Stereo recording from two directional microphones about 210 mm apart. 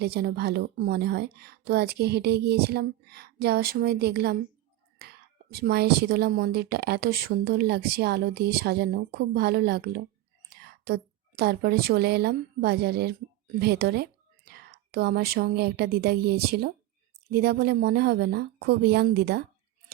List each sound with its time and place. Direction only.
0.0 s a woman's voice: 50° right (ahead or behind)